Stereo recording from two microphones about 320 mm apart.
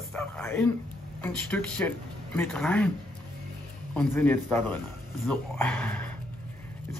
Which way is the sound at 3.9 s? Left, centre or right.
Centre.